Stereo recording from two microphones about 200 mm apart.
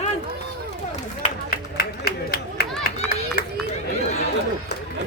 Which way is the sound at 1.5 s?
50° left (ahead or behind).